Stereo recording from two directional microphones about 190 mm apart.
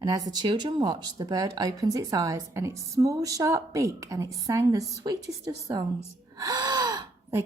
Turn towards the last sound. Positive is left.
turn(degrees=-20)  # may be behind; listen again after turning